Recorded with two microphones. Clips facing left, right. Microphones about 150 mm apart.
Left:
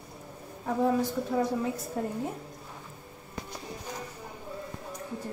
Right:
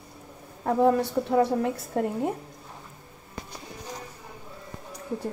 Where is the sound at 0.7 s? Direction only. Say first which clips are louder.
Right 5 dB; 60° right (ahead or behind).